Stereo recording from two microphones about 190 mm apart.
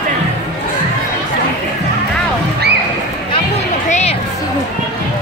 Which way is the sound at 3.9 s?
35° left (ahead or behind).